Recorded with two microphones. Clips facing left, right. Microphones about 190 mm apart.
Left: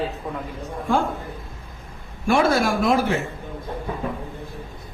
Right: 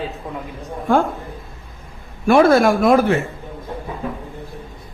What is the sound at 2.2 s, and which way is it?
Speech, 55° right (ahead or behind).